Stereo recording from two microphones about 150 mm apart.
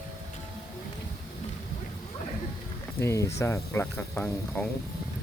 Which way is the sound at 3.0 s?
20° left (ahead or behind).